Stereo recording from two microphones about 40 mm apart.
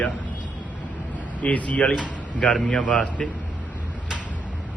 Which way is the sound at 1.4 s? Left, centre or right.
Left.